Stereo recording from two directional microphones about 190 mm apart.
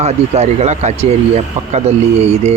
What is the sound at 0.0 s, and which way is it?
Speech, 35° right (ahead or behind).